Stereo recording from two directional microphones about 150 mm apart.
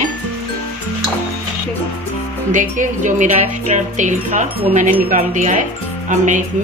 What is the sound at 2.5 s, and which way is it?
Speech, 60° right (ahead or behind).